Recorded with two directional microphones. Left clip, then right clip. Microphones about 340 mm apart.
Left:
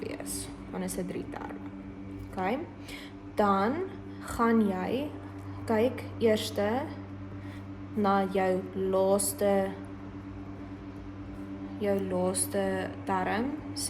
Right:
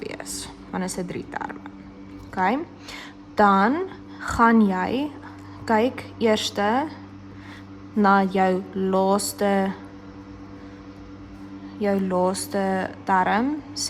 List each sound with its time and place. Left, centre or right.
0.0 s a sound: centre
2.4 s a woman's voice: right
8.0 s speech: centre
12.2 s speech: centre